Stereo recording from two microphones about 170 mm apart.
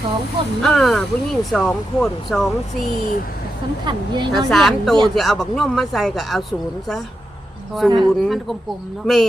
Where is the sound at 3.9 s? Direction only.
25° right (ahead or behind).